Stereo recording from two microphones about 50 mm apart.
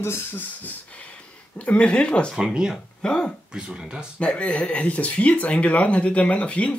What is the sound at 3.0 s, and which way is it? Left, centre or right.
Speech, centre.